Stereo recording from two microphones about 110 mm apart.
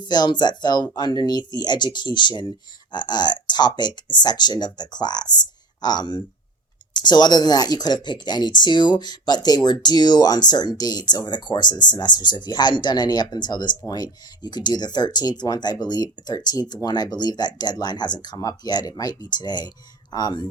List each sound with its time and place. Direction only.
0.0 s speech: 40° left (ahead or behind)